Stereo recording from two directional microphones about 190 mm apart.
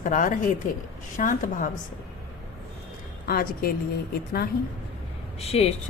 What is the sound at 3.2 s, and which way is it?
Speech, 50° left (ahead or behind).